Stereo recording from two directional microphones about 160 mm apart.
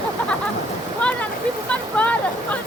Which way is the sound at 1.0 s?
5° left (ahead or behind).